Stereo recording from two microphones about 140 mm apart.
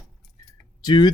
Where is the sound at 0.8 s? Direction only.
30° left (ahead or behind).